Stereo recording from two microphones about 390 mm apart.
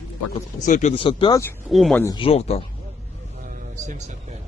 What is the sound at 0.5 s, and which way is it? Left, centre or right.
Speech, centre.